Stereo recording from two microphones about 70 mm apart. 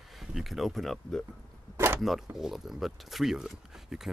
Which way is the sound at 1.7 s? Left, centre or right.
Right.